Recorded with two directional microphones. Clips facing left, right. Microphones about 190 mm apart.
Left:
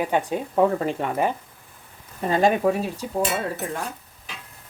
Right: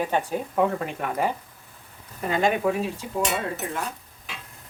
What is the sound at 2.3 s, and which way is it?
Speech, 35° left (ahead or behind).